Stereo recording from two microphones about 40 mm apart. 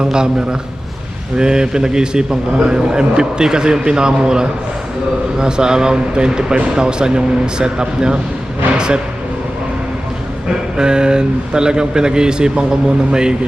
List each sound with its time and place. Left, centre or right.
0.0 s a man's voice: centre
1.4 s a man's voice: centre
10.5 s a man's voice: centre